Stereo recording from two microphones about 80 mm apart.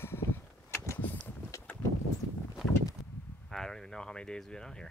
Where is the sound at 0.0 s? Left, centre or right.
Left.